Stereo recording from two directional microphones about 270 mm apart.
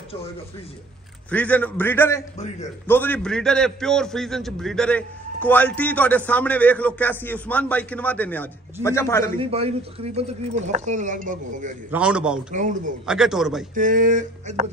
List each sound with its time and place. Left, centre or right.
1.3 s a man's voice: centre
9.4 s speech: right
11.9 s a man's voice: centre
12.4 s speech: right
13.0 s a man's voice: centre
13.7 s speech: right